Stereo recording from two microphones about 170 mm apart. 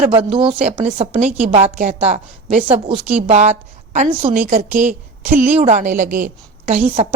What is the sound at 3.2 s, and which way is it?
A woman's voice, 40° right (ahead or behind).